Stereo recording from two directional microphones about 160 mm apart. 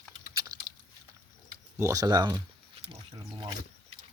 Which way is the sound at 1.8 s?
20° right (ahead or behind).